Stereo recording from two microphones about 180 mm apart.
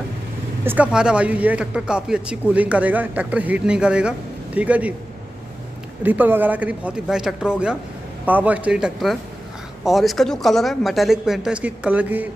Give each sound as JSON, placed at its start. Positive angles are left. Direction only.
{"t": 0.7, "sound": "speech", "side_deg": -5}
{"t": 6.0, "sound": "speech", "side_deg": -10}